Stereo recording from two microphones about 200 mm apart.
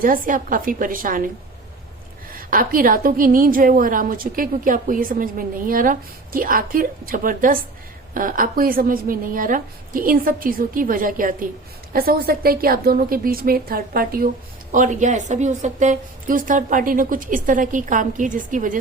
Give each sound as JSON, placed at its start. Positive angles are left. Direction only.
{"t": 0.0, "sound": "a woman's voice", "side_deg": -45}
{"t": 2.3, "sound": "a woman's voice", "side_deg": -45}